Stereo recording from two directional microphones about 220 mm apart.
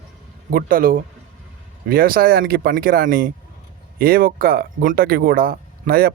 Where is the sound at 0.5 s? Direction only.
40° right (ahead or behind).